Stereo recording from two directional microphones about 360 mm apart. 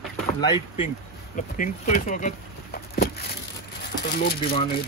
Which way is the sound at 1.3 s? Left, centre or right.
Left.